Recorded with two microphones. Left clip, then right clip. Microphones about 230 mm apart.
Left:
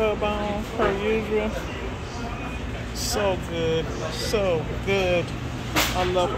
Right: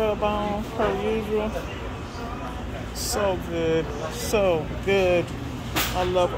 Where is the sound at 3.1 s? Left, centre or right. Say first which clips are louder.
Even; centre.